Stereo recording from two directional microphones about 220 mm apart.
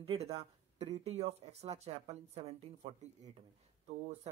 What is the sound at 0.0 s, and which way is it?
Speech, 25° right (ahead or behind).